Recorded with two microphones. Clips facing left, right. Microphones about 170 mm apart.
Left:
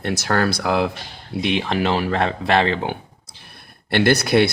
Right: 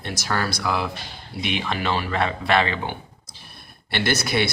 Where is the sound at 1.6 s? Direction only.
45° left (ahead or behind).